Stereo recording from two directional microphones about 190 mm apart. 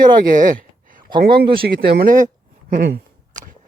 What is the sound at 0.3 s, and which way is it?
Speech, 45° right (ahead or behind).